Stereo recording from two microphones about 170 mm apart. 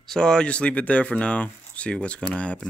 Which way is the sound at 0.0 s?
5° left (ahead or behind).